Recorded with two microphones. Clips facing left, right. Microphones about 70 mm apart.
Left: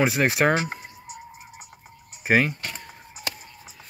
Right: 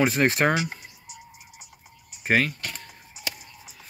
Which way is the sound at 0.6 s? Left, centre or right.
Left.